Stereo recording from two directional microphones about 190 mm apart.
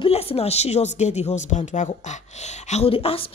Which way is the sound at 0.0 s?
30° left (ahead or behind).